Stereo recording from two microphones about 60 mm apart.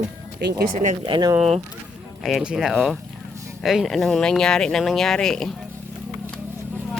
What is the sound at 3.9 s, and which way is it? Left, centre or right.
Speech, centre.